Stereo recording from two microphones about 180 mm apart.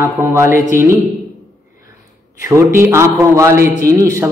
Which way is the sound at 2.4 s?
15° right (ahead or behind).